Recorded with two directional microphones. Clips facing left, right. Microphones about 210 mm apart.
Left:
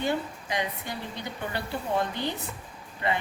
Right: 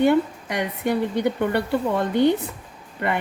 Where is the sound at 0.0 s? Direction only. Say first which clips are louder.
Right 11 dB; 60° right (ahead or behind).